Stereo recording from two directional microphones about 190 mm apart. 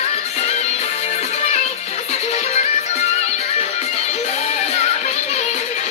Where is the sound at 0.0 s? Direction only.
35° left (ahead or behind).